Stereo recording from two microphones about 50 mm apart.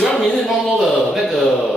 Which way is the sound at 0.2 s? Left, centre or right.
Centre.